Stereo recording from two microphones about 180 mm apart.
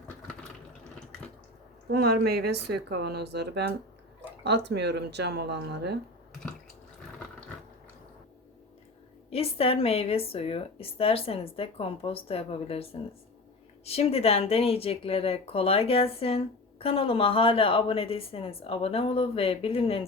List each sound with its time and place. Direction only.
1.9 s speech: 60° right (ahead or behind)
9.3 s a woman's voice: 35° left (ahead or behind)